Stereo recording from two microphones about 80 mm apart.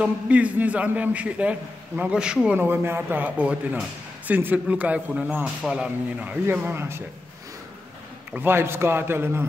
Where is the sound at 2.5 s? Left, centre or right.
Right.